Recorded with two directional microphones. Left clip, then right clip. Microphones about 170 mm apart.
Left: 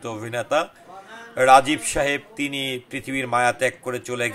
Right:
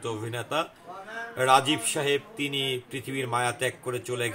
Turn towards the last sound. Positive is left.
turn(degrees=35)  # may be behind; listen again after turning